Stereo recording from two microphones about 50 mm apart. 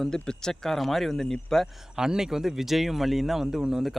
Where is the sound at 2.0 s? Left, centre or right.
Centre.